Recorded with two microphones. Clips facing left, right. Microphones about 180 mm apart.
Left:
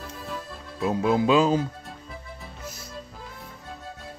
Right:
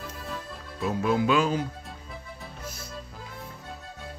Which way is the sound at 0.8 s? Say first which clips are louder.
Left 3 dB; 25° left (ahead or behind).